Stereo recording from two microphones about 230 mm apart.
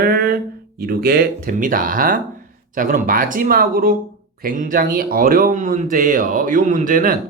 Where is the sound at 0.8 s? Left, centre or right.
Right.